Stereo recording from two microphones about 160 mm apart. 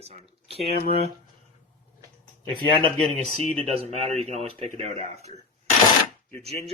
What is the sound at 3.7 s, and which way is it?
Speech, 40° right (ahead or behind).